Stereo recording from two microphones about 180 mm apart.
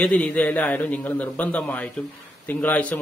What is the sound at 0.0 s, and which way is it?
A man's voice, 10° left (ahead or behind).